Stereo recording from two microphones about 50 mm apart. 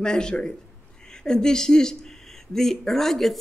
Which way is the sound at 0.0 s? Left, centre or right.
Centre.